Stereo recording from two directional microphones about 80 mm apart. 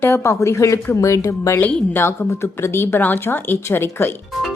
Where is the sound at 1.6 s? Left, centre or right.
Left.